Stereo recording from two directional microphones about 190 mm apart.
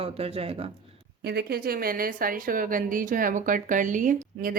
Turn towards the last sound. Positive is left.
turn(degrees=-45)  # may be behind; listen again after turning